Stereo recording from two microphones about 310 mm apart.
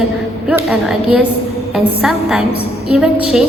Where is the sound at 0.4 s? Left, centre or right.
Centre.